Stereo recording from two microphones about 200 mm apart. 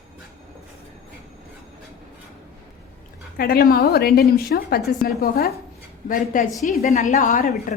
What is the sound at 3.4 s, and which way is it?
A woman's voice, 50° left (ahead or behind).